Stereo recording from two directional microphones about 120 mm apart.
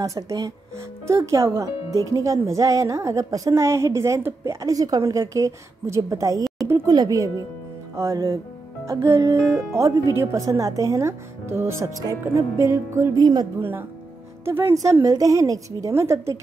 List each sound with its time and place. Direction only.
0.0 s a woman's voice: 30° right (ahead or behind)
13.2 s speech: 35° right (ahead or behind)
13.6 s a woman's voice: 15° right (ahead or behind)